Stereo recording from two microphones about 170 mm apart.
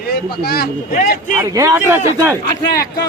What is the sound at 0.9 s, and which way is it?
Speech, 50° left (ahead or behind).